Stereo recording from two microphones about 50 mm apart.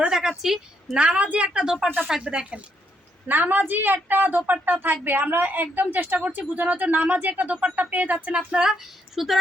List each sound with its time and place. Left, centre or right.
0.1 s a sound: centre
0.9 s a woman's voice: right
1.5 s a woman's voice: centre
3.2 s speech: right
8.4 s speech: centre